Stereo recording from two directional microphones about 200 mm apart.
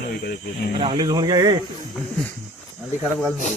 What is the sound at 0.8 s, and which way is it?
Speech, 20° right (ahead or behind).